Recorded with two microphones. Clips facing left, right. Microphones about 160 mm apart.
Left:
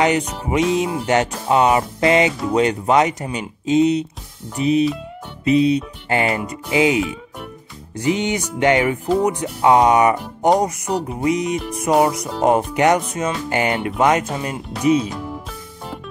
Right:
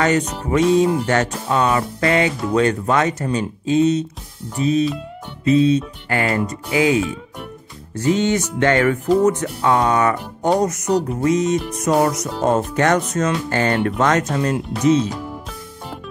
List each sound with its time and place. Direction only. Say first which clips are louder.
0.0 s speech: even; 15° left (ahead or behind)